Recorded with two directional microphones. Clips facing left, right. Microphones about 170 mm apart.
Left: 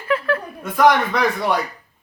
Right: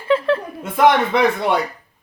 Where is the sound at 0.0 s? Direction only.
25° right (ahead or behind).